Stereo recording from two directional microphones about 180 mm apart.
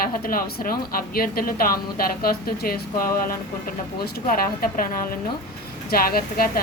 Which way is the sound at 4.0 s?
55° left (ahead or behind).